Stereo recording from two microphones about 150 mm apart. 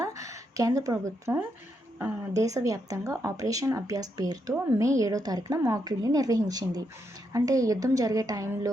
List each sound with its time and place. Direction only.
0.0 s speech: 20° right (ahead or behind)